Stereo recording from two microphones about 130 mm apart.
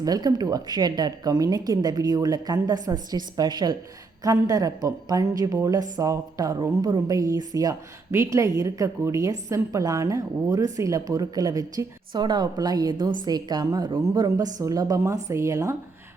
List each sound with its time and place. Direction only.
0.0 s speech: 30° right (ahead or behind)